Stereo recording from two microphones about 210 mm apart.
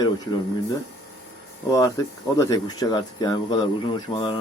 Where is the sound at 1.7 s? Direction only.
15° left (ahead or behind).